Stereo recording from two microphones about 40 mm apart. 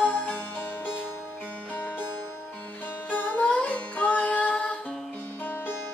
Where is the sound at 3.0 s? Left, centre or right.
Left.